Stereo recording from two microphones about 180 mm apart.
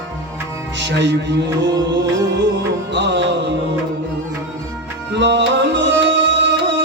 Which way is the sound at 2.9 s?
75° right (ahead or behind).